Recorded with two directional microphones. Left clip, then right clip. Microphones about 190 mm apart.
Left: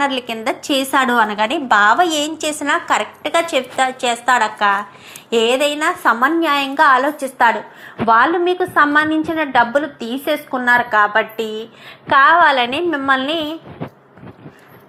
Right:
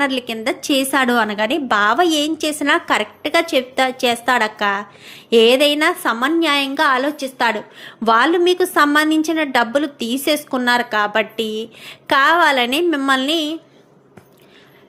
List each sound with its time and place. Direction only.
0.0 s a woman's voice: 45° right (ahead or behind)
6.1 s a woman's voice: 30° right (ahead or behind)
8.0 s a woman's voice: 50° right (ahead or behind)